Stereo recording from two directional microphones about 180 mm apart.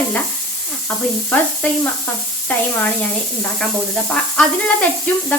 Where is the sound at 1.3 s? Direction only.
10° left (ahead or behind).